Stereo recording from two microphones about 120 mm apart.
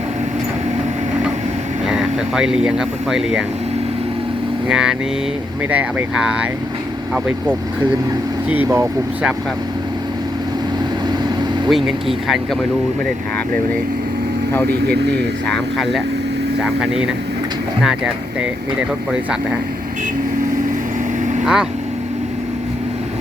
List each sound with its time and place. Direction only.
1.9 s speech: 5° right (ahead or behind)
4.7 s speech: 5° right (ahead or behind); by 8.9 s 20° right (ahead or behind)
11.7 s speech: centre (ahead or behind)
15.4 s speech: centre (ahead or behind)
21.4 s speech: 5° right (ahead or behind)